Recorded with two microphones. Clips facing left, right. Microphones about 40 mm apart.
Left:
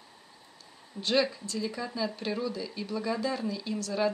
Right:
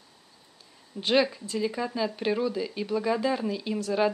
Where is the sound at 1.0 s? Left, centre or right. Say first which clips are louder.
Right 3 dB; centre.